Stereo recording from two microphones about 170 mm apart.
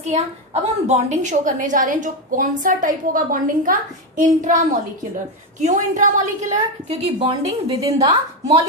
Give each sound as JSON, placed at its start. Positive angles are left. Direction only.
{"t": 0.0, "sound": "a woman's voice", "side_deg": -40}
{"t": 5.5, "sound": "a woman's voice", "side_deg": -45}